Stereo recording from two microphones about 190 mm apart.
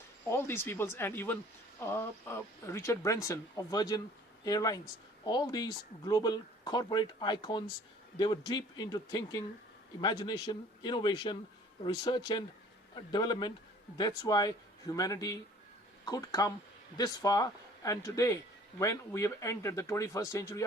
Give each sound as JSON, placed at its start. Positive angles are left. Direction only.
{"t": 0.3, "sound": "speech", "side_deg": 10}